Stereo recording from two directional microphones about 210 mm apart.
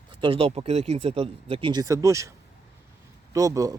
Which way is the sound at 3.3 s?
15° right (ahead or behind).